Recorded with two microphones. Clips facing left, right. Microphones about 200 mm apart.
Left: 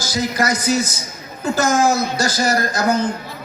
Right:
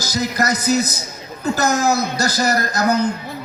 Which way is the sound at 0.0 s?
40° right (ahead or behind).